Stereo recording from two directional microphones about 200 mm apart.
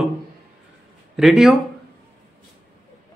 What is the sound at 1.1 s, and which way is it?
Speech, centre (ahead or behind).